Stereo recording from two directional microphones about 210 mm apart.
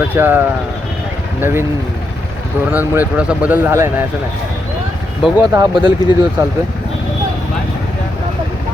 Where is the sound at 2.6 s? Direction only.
10° right (ahead or behind).